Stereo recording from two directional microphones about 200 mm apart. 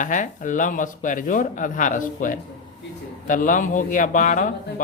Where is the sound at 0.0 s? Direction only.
40° left (ahead or behind).